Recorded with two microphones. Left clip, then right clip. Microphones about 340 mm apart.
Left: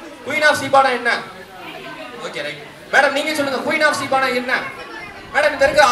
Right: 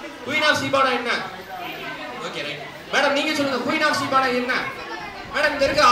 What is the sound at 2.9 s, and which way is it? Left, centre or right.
Speech, left.